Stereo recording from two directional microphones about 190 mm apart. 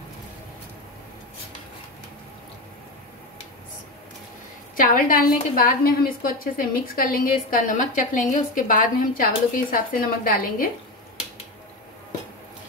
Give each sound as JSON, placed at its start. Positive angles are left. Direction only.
{"t": 4.7, "sound": "a woman's voice", "side_deg": 45}